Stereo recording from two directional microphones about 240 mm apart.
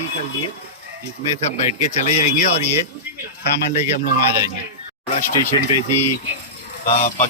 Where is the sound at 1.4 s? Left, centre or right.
Left.